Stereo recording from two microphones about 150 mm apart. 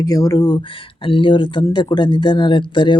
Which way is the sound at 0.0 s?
25° left (ahead or behind).